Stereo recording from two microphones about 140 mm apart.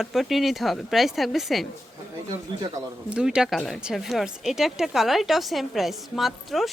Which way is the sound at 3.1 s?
5° right (ahead or behind).